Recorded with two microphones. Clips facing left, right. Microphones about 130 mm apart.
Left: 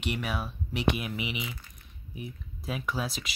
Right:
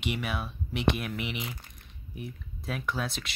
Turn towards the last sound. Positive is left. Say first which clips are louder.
# even
turn(degrees=0)  # may be behind; listen again after turning